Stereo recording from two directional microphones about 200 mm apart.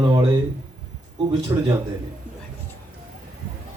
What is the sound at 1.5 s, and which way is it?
Speech, 15° right (ahead or behind).